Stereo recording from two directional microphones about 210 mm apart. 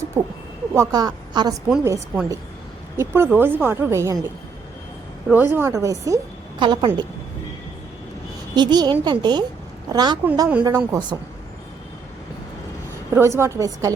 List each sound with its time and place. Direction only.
0.1 s a woman's voice: 10° right (ahead or behind)
1.7 s speech: 10° right (ahead or behind)
5.3 s a woman's voice: 10° right (ahead or behind)
8.5 s a woman's voice: 20° right (ahead or behind)
13.1 s speech: 10° right (ahead or behind)